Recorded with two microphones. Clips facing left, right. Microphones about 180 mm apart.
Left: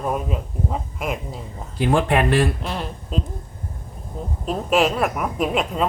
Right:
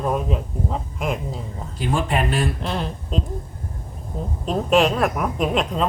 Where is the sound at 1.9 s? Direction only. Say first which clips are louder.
Left 4 dB; 60° left (ahead or behind).